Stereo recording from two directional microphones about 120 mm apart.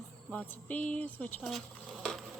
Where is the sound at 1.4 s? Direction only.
Centre (ahead or behind).